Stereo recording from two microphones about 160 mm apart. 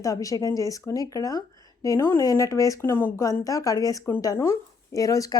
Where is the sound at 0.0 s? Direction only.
20° left (ahead or behind).